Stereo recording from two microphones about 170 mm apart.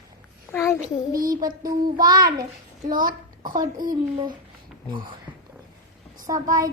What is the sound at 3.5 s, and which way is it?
Speech, 25° right (ahead or behind).